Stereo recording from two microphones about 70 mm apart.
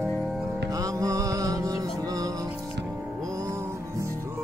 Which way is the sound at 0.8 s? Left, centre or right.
Right.